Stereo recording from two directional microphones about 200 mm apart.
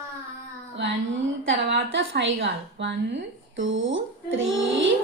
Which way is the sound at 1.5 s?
70° right (ahead or behind).